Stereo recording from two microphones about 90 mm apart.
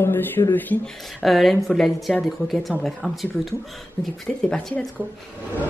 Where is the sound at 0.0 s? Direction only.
25° left (ahead or behind).